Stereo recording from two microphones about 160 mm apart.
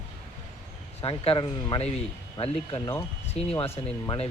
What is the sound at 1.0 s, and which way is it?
Speech, 35° left (ahead or behind).